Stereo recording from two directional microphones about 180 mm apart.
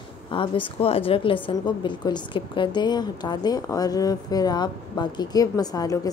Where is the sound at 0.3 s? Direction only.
30° left (ahead or behind).